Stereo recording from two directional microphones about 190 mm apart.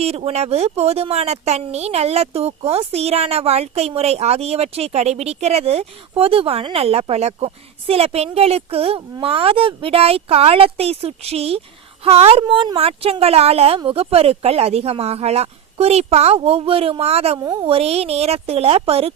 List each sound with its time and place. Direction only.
0.0 s speech: 35° right (ahead or behind)
17.4 s a woman's voice: 20° right (ahead or behind)
17.7 s speech: 30° right (ahead or behind)